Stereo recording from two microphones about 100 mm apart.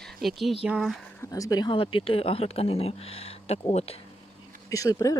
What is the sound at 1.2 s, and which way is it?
Speech, 35° left (ahead or behind).